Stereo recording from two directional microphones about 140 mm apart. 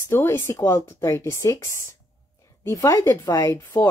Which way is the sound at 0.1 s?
15° left (ahead or behind).